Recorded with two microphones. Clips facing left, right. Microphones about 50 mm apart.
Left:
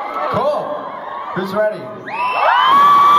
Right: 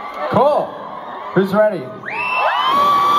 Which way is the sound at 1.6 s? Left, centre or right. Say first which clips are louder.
Right 1 dB; centre.